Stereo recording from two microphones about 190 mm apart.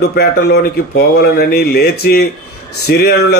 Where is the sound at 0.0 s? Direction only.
55° left (ahead or behind).